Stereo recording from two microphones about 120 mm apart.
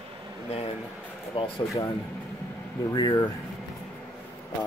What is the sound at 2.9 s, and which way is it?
Speech, 35° left (ahead or behind).